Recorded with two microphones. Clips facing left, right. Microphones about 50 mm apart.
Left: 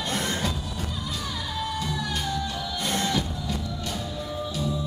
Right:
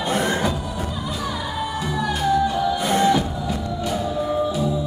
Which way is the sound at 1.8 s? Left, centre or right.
Centre.